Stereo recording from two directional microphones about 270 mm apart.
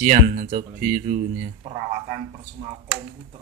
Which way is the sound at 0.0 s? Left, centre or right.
Right.